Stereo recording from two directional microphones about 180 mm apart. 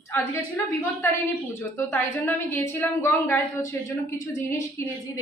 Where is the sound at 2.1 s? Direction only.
10° left (ahead or behind).